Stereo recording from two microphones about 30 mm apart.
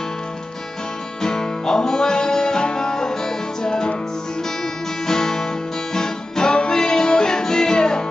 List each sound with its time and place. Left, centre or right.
1.2 s music: left
5.0 s guitar: left
5.9 s music: left